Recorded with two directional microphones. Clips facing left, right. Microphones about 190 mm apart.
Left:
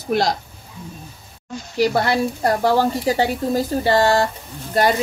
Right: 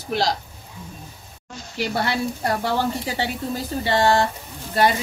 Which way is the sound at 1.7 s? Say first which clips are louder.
Left 6 dB; 45° left (ahead or behind).